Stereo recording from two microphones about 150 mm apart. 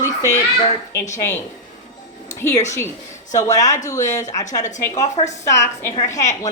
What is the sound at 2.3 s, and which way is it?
A woman's voice, 20° left (ahead or behind).